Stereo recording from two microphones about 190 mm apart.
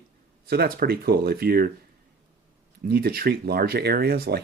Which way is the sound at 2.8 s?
55° right (ahead or behind).